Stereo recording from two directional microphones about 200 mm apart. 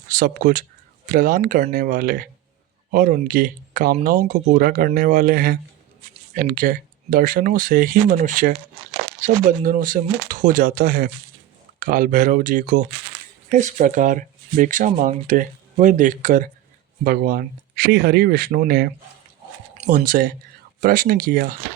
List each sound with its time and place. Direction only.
0.1 s speech: 45° right (ahead or behind)